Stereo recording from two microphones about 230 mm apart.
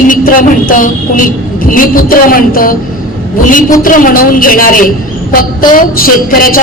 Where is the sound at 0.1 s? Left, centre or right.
Left.